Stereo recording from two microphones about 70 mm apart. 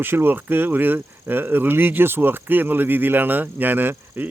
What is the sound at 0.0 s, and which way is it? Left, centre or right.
Speech, right.